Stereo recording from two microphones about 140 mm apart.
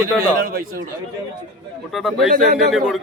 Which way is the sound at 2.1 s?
90° right.